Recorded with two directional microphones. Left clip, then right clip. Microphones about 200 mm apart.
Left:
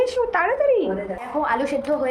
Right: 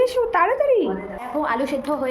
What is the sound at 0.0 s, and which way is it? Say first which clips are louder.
Speech: right 2 dB; 25° right (ahead or behind).